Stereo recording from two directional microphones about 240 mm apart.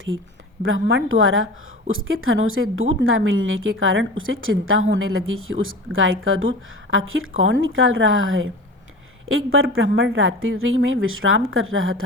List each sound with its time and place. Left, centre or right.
0.6 s a woman's voice: right